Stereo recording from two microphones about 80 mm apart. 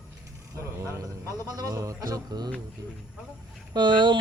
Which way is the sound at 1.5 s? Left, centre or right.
Right.